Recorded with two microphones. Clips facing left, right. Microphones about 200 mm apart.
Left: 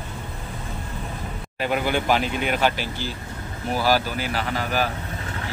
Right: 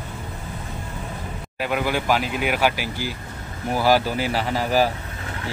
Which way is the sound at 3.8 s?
25° right (ahead or behind).